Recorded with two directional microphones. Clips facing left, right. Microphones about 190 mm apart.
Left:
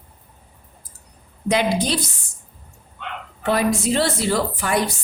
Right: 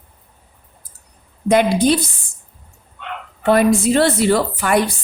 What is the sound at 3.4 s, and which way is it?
A woman's voice, 55° right (ahead or behind).